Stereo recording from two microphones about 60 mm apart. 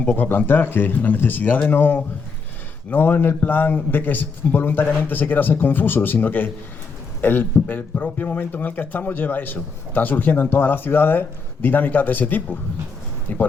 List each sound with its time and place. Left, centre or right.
0.0 s speech: left
0.3 s speech: left